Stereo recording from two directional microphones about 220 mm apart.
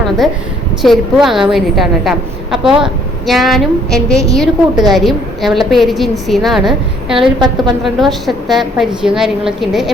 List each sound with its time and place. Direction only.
0.8 s a woman's voice: centre (ahead or behind)
7.3 s a woman's voice: 20° right (ahead or behind)
7.9 s a woman's voice: centre (ahead or behind)